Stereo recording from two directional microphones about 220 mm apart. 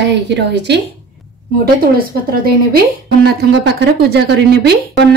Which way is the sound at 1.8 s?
45° right (ahead or behind).